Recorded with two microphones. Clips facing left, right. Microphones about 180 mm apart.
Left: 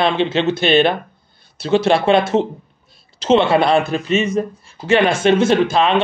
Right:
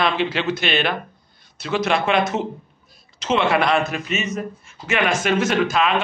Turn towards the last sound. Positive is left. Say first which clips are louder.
# left 5 dB
turn(degrees=30)  # may be behind; listen again after turning